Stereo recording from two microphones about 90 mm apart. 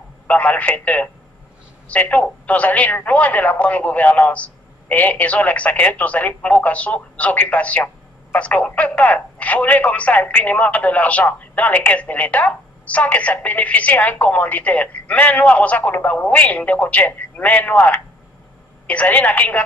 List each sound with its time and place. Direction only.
0.3 s speech: 15° left (ahead or behind)